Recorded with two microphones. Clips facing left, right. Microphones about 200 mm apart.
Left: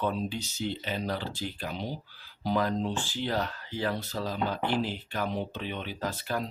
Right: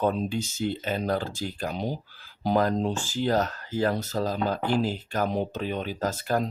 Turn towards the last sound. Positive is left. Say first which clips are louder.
# right 6 dB
turn(degrees=-45)  # may be behind; listen again after turning